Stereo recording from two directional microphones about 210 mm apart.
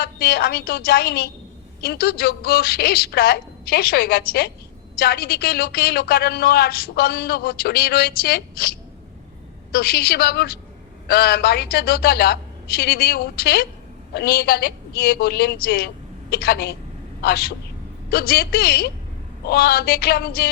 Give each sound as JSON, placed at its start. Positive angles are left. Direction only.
{"t": 0.0, "sound": "a woman's voice", "side_deg": 45}
{"t": 9.7, "sound": "a woman's voice", "side_deg": 45}